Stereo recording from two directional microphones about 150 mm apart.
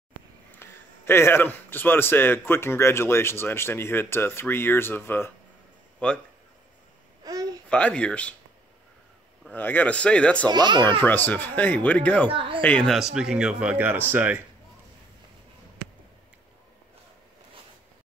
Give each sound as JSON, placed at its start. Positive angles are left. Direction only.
{"t": 0.6, "sound": "a man's voice", "side_deg": 15}
{"t": 7.7, "sound": "a man's voice", "side_deg": 10}
{"t": 9.5, "sound": "a man's voice", "side_deg": 10}
{"t": 10.5, "sound": "speech", "side_deg": -30}
{"t": 10.8, "sound": "a man's voice", "side_deg": 15}
{"t": 12.3, "sound": "speech", "side_deg": -35}
{"t": 12.6, "sound": "a man's voice", "side_deg": 5}